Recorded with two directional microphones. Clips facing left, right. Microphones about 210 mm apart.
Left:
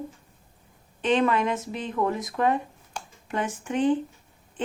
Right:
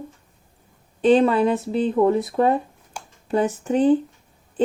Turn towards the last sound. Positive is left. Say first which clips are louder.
# right 10 dB
turn(degrees=-35)  # may be behind; listen again after turning